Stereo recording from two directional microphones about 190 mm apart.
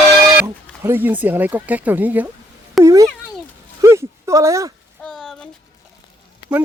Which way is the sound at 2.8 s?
15° right (ahead or behind).